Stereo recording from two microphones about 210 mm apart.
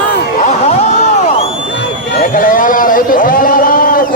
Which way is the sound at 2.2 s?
40° left (ahead or behind).